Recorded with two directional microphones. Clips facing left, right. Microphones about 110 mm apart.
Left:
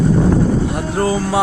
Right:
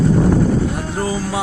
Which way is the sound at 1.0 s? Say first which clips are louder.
Left 6 dB; 65° left (ahead or behind).